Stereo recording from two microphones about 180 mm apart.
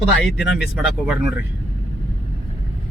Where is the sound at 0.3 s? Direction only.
5° right (ahead or behind).